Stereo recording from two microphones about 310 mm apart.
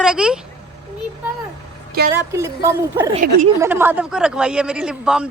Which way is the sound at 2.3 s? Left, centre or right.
Centre.